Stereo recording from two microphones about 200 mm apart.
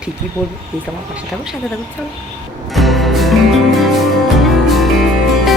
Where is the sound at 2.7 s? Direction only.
Centre (ahead or behind).